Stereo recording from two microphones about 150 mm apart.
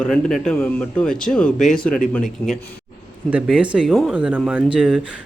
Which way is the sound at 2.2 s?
55° left (ahead or behind).